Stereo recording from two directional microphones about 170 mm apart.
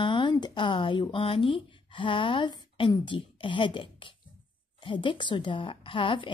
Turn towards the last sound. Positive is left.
turn(degrees=30)  # may be behind; listen again after turning